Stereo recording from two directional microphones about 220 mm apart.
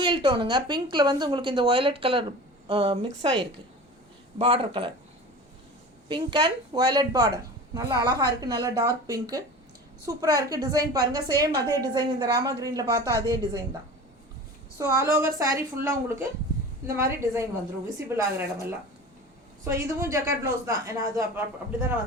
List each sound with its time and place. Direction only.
0.0 s a woman's voice: 20° right (ahead or behind)
4.4 s a woman's voice: 25° right (ahead or behind)
6.1 s a woman's voice: 20° right (ahead or behind)
14.8 s a woman's voice: 10° right (ahead or behind)